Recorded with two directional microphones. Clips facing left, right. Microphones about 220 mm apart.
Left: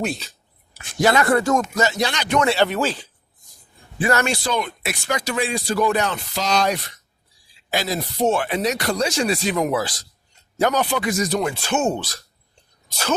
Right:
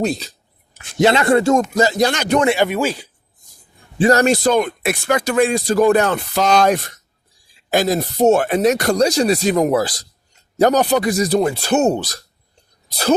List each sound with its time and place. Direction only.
0.0 s speech: 35° right (ahead or behind)
0.9 s speech: 25° right (ahead or behind); by 2.4 s 45° right (ahead or behind)
2.4 s speech: 15° right (ahead or behind)
3.9 s speech: 35° right (ahead or behind)